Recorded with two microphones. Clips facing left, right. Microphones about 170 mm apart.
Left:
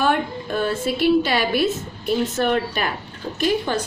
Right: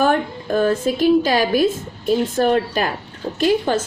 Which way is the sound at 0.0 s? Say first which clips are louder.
Right 3 dB; 45° right (ahead or behind).